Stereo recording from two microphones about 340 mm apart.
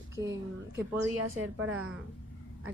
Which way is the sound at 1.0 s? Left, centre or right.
Right.